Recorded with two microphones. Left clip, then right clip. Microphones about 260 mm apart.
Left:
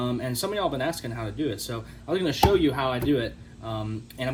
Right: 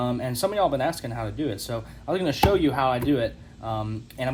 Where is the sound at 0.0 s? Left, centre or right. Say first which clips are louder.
Right 3 dB; right.